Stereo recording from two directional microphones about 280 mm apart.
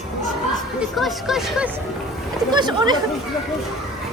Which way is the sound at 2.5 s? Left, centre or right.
Centre.